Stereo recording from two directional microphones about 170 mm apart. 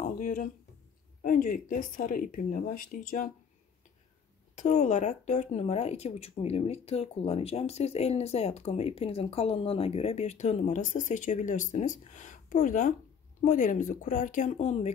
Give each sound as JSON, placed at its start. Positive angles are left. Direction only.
{"t": 0.0, "sound": "a sound", "side_deg": 50}
{"t": 1.2, "sound": "speech", "side_deg": 55}
{"t": 4.6, "sound": "speech", "side_deg": 45}